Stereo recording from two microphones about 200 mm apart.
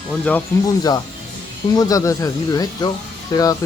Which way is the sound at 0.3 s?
10° left (ahead or behind).